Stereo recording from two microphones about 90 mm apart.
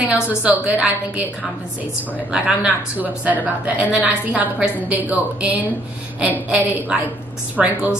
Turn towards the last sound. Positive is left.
turn(degrees=-15)  # may be behind; listen again after turning